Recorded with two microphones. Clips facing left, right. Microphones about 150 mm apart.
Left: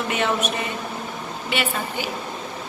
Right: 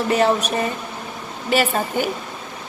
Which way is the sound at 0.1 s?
35° right (ahead or behind).